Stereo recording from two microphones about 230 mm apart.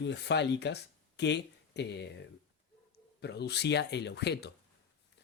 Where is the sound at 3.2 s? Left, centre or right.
Left.